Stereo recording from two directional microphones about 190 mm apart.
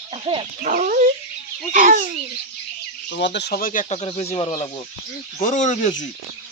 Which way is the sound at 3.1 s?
65° left (ahead or behind).